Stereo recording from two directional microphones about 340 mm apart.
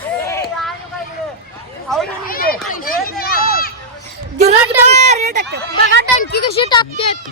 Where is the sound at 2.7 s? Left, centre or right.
Left.